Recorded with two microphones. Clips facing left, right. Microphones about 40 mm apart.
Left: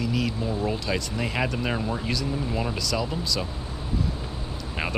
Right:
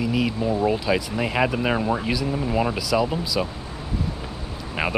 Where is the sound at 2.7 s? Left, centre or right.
Centre.